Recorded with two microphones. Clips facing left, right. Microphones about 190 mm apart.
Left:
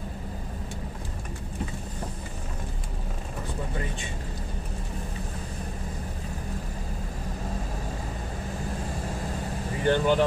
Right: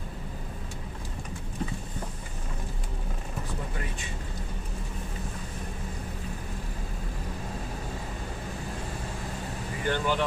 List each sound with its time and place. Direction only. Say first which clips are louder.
9.8 s speech: left 6 dB; 30° left (ahead or behind)